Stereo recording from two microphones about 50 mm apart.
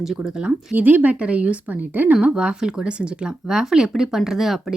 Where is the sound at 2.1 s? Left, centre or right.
Centre.